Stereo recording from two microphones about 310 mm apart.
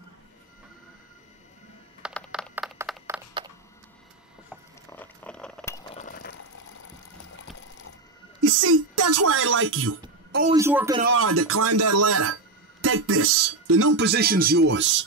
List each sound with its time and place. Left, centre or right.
2.0 s a sound: centre
4.9 s keys jangling: centre
5.9 s a sound: left
8.4 s speech: right
10.5 s a man's voice: centre
11.1 s speech: right